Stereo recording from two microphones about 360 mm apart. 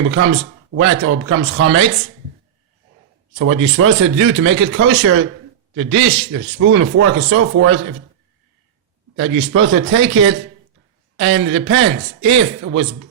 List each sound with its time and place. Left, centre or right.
0.0 s a man's voice: right
3.3 s a man's voice: right
6.6 s a man's voice: right
9.1 s a man's voice: right